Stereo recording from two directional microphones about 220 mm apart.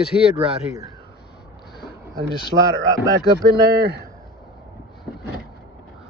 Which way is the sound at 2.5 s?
30° right (ahead or behind).